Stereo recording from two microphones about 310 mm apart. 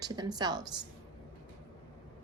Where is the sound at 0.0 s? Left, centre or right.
Centre.